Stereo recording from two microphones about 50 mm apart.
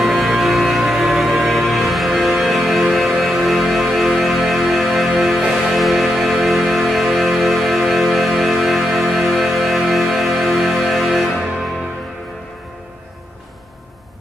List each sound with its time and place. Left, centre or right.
0.0 s music: centre